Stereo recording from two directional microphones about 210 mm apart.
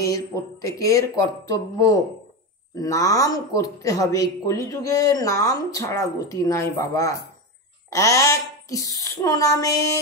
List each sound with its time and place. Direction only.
0.0 s speech: 15° left (ahead or behind)
2.7 s speech: 15° left (ahead or behind)